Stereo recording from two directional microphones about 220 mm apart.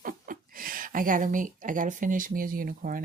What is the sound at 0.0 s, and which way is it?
A woman's voice, 40° right (ahead or behind).